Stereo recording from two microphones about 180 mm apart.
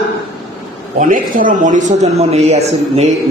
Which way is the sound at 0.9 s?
50° right (ahead or behind).